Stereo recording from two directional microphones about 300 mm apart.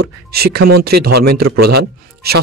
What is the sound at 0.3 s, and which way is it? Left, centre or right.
Speech, right.